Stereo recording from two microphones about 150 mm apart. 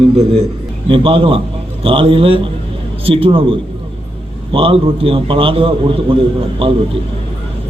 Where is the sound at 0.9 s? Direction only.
35° right (ahead or behind).